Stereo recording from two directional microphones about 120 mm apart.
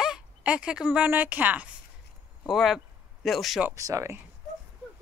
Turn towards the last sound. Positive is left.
turn(degrees=-25)  # may be behind; listen again after turning